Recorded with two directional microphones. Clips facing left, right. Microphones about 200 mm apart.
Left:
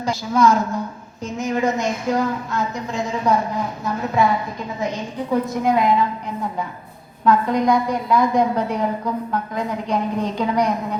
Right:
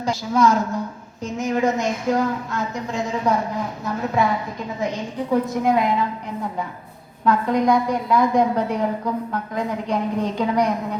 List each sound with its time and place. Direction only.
0.0 s a woman's voice: 35° right (ahead or behind)
1.2 s a woman's voice: 50° right (ahead or behind)
5.3 s a woman's voice: 55° right (ahead or behind)
7.3 s a woman's voice: 55° right (ahead or behind)